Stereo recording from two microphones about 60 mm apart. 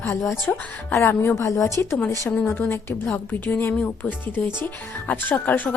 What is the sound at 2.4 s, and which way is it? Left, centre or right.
A woman's voice, left.